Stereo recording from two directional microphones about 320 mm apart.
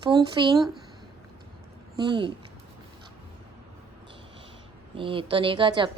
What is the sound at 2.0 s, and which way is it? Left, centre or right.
Speech, centre.